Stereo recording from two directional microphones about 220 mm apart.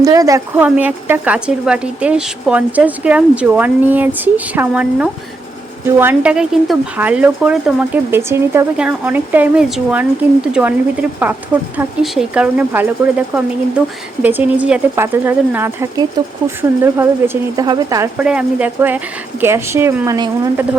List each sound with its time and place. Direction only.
0.0 s a woman's voice: 15° right (ahead or behind)